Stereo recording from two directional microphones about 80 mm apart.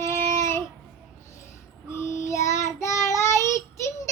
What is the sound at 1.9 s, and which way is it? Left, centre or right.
Child singing, left.